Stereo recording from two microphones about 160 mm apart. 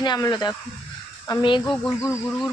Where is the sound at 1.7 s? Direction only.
5° left (ahead or behind).